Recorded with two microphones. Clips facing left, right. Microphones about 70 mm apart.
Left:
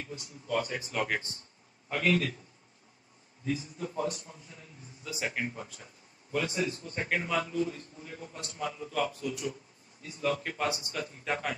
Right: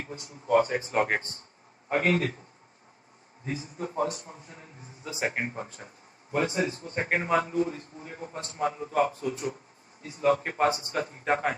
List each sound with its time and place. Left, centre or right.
0.0 s a man's voice: right
3.4 s a man's voice: right